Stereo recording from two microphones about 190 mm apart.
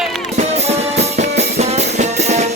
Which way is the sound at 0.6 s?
35° right (ahead or behind).